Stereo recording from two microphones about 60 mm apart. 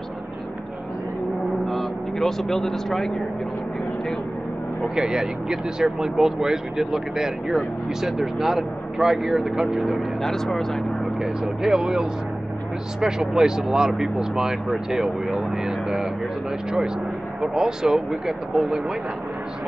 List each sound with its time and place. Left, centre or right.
1.7 s speech: centre
4.8 s speech: centre
10.2 s speech: centre
11.2 s speech: centre
17.4 s speech: centre